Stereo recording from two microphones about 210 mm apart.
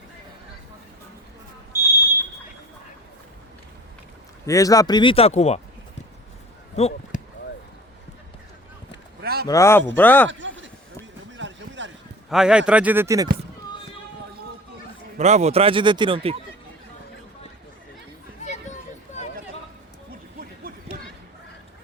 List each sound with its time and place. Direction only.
1.7 s smoke detector: 10° right (ahead or behind)
4.4 s speech: 15° left (ahead or behind); by 5.5 s 30° left (ahead or behind)
6.7 s basketball bounce: 30° left (ahead or behind)
9.2 s a sound: 45° right (ahead or behind)
9.5 s speech: 15° left (ahead or behind)
10.2 s a sound: 60° right (ahead or behind)
12.3 s speech: 5° right (ahead or behind)
15.2 s speech: 30° right (ahead or behind)
20.7 s a sound: 40° right (ahead or behind)